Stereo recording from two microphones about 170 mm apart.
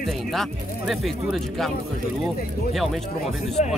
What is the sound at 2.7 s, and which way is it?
Speech, centre (ahead or behind).